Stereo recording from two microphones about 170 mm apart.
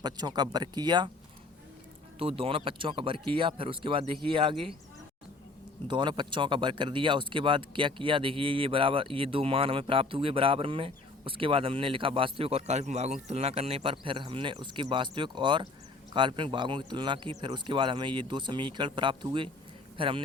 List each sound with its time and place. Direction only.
0.0 s speech: 25° right (ahead or behind)
2.1 s speech: 35° right (ahead or behind)
5.9 s speech: 25° right (ahead or behind)